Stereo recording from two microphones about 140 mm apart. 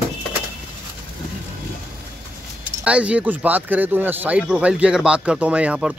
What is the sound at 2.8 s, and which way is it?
Speech, 10° right (ahead or behind).